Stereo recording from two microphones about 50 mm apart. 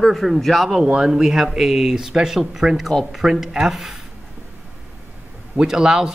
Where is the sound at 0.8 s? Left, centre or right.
Centre.